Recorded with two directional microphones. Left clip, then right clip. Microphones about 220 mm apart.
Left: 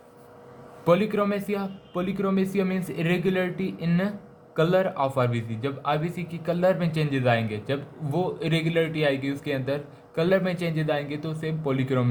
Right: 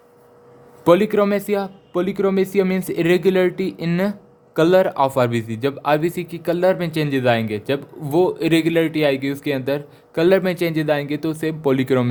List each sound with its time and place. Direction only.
0.9 s speech: 45° right (ahead or behind)